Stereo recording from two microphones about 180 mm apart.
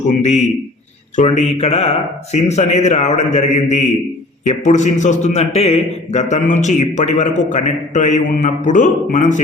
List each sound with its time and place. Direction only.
0.2 s a man's voice: 40° left (ahead or behind)